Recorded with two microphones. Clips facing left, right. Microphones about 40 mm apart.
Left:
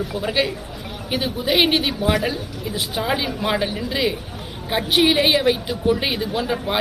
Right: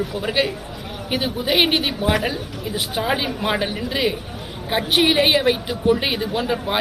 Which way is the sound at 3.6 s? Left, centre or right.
Centre.